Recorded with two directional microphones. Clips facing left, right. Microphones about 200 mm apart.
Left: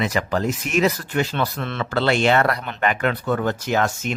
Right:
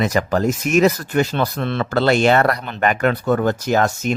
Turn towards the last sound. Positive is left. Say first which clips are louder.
# right 4 dB
turn(degrees=-40)  # may be behind; listen again after turning